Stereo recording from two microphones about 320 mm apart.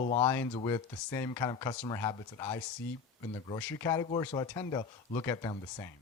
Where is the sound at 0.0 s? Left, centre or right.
Centre.